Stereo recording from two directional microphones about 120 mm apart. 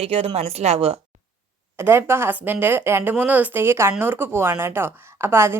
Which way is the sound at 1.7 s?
20° right (ahead or behind).